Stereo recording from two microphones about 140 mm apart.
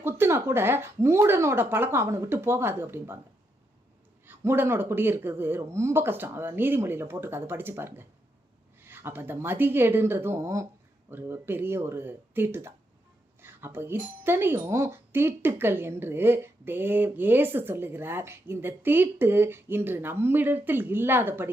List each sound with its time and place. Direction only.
0.0 s speech: 15° right (ahead or behind)
4.3 s speech: 15° right (ahead or behind)